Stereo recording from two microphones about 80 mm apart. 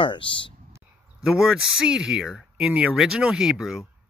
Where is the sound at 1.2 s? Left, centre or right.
Centre.